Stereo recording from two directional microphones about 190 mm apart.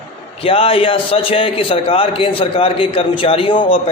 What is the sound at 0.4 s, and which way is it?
A man's voice, 30° left (ahead or behind).